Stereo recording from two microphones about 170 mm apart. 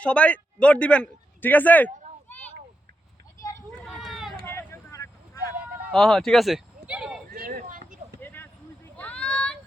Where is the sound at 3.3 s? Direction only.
20° left (ahead or behind).